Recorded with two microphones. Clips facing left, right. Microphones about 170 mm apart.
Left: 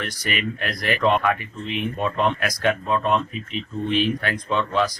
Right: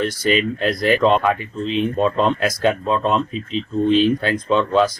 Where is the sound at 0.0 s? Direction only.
25° right (ahead or behind).